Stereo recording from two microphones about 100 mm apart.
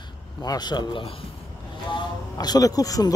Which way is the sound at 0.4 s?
40° left (ahead or behind).